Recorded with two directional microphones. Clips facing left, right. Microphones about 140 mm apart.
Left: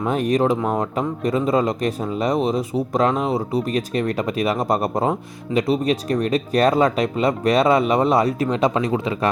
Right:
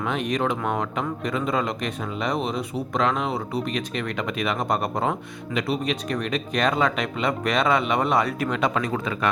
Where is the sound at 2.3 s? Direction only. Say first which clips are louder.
Left 6 dB; centre (ahead or behind).